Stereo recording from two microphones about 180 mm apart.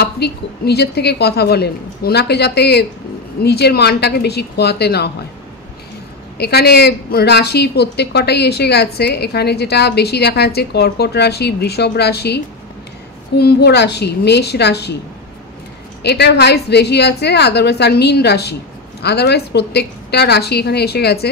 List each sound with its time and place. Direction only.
0.0 s a woman's voice: 65° left (ahead or behind)
6.3 s a woman's voice: 65° left (ahead or behind)
13.4 s a woman's voice: 65° left (ahead or behind)
16.0 s a woman's voice: 70° left (ahead or behind)